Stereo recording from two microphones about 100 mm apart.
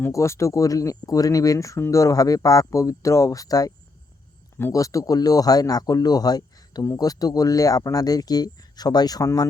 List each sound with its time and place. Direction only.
0.1 s speech: 30° left (ahead or behind)
4.7 s speech: 35° left (ahead or behind)